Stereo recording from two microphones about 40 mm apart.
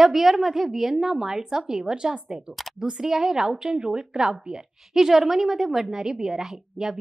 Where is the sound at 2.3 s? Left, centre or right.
Centre.